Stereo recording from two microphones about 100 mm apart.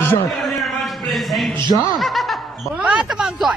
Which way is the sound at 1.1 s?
Centre (ahead or behind).